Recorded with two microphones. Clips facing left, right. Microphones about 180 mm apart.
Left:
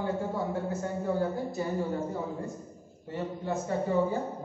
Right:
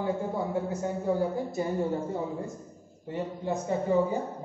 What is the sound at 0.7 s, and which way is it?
A man's voice, 15° right (ahead or behind).